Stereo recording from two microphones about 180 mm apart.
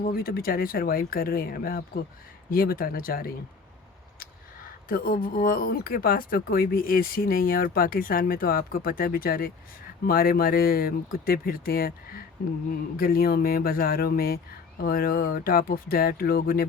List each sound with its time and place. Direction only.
0.0 s speech: 55° left (ahead or behind)